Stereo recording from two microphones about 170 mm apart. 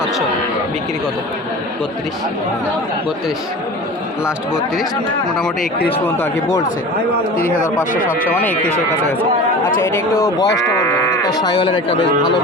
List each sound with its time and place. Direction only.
6.1 s speech: 15° left (ahead or behind)
7.3 s speech: 55° left (ahead or behind)
8.3 s speech: 10° left (ahead or behind)
9.6 s speech: 15° left (ahead or behind)
10.8 s livestock: 15° left (ahead or behind)